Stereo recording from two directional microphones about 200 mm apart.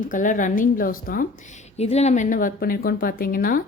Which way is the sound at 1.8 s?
35° left (ahead or behind).